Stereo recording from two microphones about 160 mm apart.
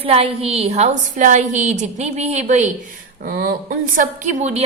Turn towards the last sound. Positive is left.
turn(degrees=-45)  # may be behind; listen again after turning